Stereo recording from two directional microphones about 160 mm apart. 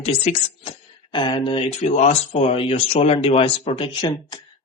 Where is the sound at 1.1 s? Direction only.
30° left (ahead or behind).